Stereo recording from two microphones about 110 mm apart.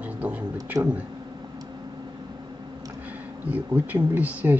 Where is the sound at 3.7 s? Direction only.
15° right (ahead or behind).